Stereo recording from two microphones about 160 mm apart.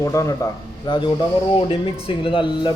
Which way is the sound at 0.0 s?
20° left (ahead or behind).